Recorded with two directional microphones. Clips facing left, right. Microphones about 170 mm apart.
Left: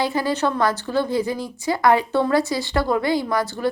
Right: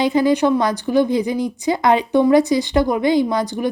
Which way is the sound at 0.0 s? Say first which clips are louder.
Right 6 dB; 20° right (ahead or behind).